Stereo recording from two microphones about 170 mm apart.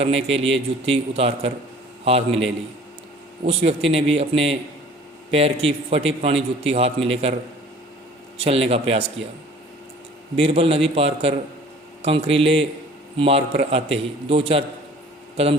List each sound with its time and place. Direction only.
0.0 s a man's voice: 35° right (ahead or behind)
8.4 s a man's voice: 35° right (ahead or behind)
10.3 s a man's voice: 35° right (ahead or behind)